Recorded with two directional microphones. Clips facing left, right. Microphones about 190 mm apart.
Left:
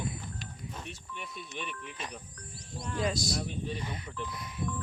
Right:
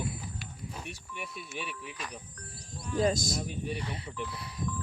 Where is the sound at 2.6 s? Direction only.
40° right (ahead or behind).